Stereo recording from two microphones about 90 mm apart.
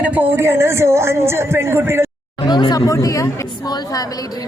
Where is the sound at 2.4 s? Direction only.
50° left (ahead or behind).